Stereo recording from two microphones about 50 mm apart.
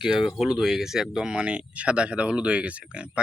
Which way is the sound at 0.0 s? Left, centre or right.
Centre.